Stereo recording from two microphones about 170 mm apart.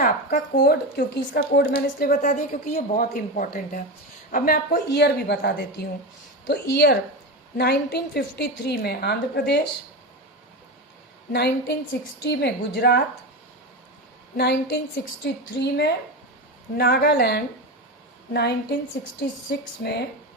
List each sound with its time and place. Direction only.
0.0 s a woman's voice: 60° left (ahead or behind)
1.7 s a woman's voice: 55° left (ahead or behind); by 9.6 s 75° left (ahead or behind)
11.3 s a woman's voice: 75° left (ahead or behind)
14.3 s a woman's voice: 75° left (ahead or behind)
15.2 s a woman's voice: 85° left
16.7 s a woman's voice: 75° left (ahead or behind)